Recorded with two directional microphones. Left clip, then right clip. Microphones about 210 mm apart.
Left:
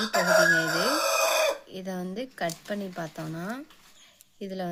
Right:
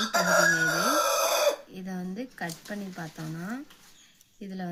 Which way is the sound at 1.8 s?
50° left (ahead or behind).